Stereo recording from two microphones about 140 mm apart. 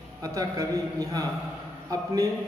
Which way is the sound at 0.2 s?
25° right (ahead or behind).